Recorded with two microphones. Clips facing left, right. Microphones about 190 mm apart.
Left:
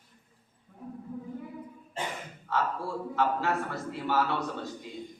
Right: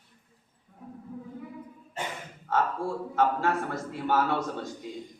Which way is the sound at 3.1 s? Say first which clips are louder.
Right 2 dB; 45° right (ahead or behind).